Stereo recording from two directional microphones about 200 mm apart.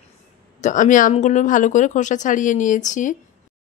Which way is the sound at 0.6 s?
40° left (ahead or behind).